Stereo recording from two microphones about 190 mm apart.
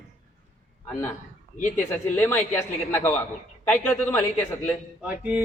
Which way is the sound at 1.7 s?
10° left (ahead or behind).